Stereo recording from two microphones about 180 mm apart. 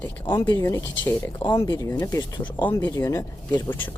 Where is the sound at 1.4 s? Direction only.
25° left (ahead or behind).